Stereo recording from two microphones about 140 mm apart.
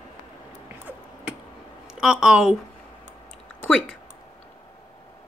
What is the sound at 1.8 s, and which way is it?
Speech, 5° right (ahead or behind).